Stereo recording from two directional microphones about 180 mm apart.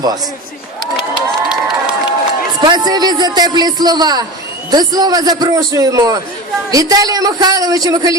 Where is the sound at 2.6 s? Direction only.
20° right (ahead or behind).